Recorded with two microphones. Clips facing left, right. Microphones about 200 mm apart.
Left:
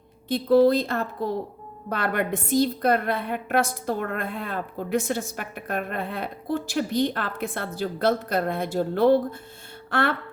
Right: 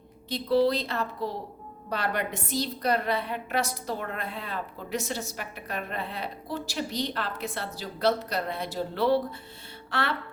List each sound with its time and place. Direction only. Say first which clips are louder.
0.3 s a woman's voice: left 6 dB; 50° left (ahead or behind)